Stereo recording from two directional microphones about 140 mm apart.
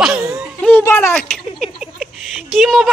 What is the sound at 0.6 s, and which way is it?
Speech, 15° left (ahead or behind).